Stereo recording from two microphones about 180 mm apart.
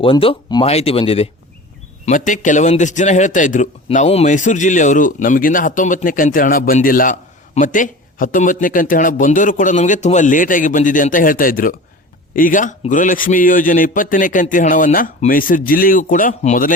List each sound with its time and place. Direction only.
0.0 s speech: 30° left (ahead or behind)
2.0 s a man's voice: 45° left (ahead or behind)